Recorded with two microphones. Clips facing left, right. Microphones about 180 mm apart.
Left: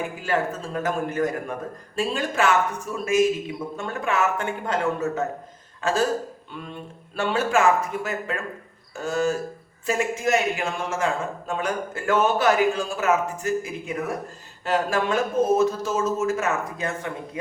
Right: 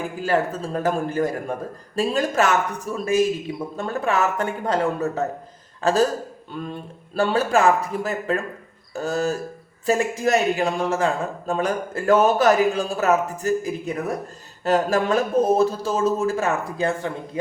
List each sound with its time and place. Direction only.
0.2 s a man's voice: 35° right (ahead or behind)
7.2 s a man's voice: 35° right (ahead or behind)